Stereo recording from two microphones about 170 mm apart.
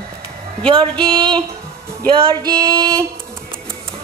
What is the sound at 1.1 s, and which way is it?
Female singing, 30° right (ahead or behind).